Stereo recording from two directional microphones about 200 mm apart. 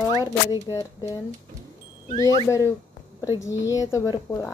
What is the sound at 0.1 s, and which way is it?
A woman's voice, 20° left (ahead or behind).